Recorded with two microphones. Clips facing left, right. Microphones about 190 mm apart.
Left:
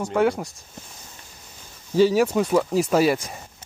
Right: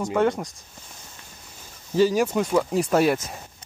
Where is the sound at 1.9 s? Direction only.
Centre (ahead or behind).